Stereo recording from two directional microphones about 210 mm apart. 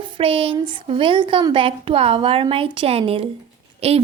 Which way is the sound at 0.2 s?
25° right (ahead or behind).